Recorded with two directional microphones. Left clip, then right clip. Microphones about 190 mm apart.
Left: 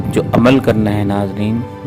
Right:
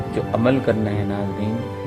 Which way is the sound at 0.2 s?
40° left (ahead or behind).